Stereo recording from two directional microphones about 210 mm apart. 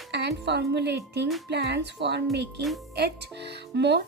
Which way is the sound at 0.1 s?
55° right (ahead or behind).